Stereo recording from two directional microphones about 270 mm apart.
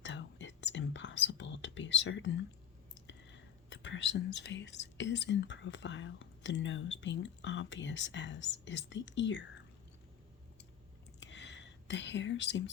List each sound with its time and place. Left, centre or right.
0.0 s whispering: left
3.1 s speech: left
11.2 s whispering: left